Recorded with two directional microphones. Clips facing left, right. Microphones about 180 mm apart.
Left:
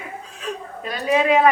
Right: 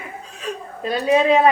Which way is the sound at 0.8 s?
30° right (ahead or behind).